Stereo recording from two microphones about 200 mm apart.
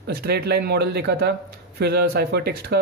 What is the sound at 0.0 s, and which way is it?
Speech, 50° right (ahead or behind).